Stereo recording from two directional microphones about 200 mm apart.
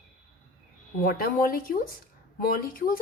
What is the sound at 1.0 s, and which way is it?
Speech, 45° left (ahead or behind).